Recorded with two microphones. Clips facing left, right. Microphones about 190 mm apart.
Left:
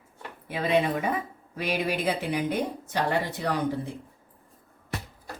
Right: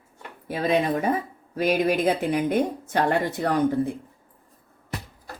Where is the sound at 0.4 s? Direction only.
40° right (ahead or behind).